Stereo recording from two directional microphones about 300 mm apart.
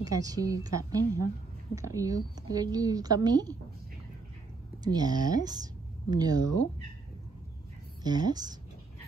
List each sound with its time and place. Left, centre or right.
0.0 s a woman's voice: centre
4.8 s speech: centre
8.0 s a woman's voice: centre